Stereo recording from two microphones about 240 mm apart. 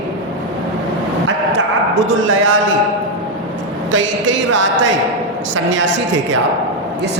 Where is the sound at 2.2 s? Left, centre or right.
Right.